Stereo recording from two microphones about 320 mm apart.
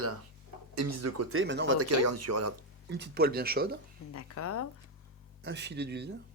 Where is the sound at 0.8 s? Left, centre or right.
Right.